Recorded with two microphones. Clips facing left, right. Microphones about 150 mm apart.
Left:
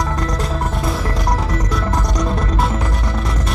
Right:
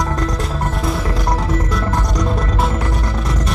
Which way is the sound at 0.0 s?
Centre (ahead or behind).